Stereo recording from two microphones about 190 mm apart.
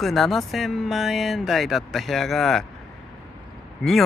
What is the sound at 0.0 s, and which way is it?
Speech, centre (ahead or behind).